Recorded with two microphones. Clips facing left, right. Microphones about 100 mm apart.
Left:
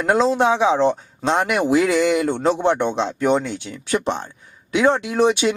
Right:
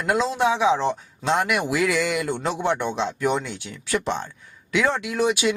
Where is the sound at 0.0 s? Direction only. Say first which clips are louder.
Left 5 dB; 35° left (ahead or behind).